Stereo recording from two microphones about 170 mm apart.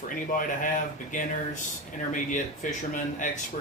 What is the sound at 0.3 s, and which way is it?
Speech, 50° left (ahead or behind).